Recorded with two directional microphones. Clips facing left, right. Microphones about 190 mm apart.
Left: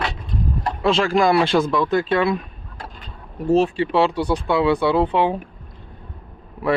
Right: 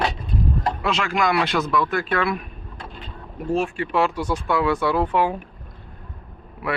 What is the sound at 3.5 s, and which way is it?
Speech, 35° left (ahead or behind).